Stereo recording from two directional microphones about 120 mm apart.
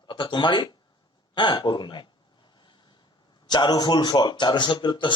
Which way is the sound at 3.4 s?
35° left (ahead or behind).